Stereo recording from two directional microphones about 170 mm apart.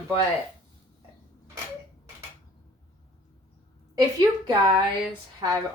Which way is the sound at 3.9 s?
25° right (ahead or behind).